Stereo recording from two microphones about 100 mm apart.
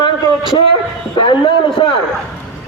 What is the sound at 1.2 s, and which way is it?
Speech, 55° left (ahead or behind).